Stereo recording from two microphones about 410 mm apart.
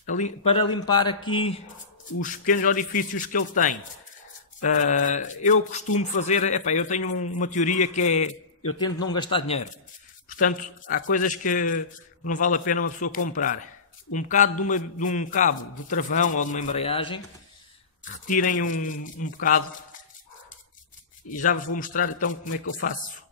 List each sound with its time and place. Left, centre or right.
0.0 s a man's voice: centre
7.1 s a man's voice: left
7.3 s a man's voice: centre
21.3 s a man's voice: centre